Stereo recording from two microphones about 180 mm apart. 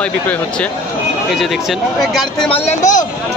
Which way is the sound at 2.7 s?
45° left (ahead or behind).